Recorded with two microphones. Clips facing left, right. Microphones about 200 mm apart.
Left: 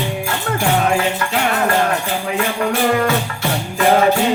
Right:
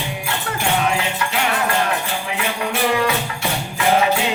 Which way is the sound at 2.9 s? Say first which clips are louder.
Left 3 dB; 45° left (ahead or behind).